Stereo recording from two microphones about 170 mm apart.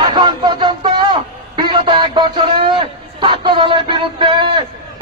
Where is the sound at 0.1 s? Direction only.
25° right (ahead or behind).